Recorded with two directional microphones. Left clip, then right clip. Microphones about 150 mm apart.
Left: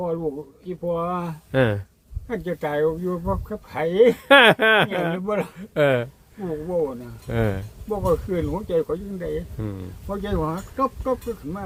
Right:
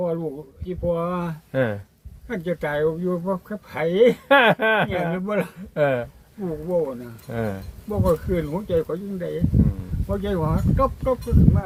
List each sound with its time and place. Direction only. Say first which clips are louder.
0.0 s speech: even; 5° left (ahead or behind)
1.5 s speech: left 2 dB; 70° left (ahead or behind)
2.2 s speech: right 1 dB; 10° left (ahead or behind)
4.3 s speech: left 3 dB; 70° left (ahead or behind)
5.2 s speech: even; 10° left (ahead or behind)
5.7 s speech: left 2 dB; 70° left (ahead or behind)
7.3 s speech: left 3 dB; 70° left (ahead or behind)
7.9 s speech: even; 5° left (ahead or behind)